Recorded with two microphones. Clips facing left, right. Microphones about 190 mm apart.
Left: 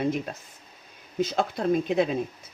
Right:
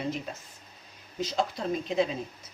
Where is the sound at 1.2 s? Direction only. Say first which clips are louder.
Left 4 dB; 55° left (ahead or behind).